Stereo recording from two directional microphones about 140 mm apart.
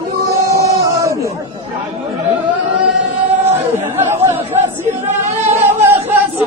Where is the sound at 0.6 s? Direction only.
20° right (ahead or behind).